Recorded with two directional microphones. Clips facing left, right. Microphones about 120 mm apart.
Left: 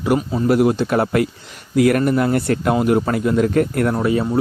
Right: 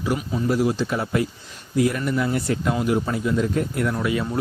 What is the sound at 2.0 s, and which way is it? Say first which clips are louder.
Speech: left 6 dB; 55° left (ahead or behind).